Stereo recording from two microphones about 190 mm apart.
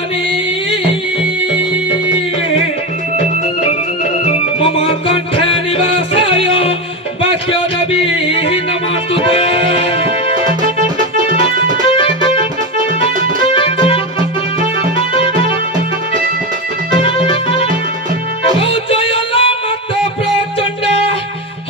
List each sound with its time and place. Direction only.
4.2 s music: 30° left (ahead or behind)
13.5 s music: 30° left (ahead or behind)
17.0 s music: 30° left (ahead or behind)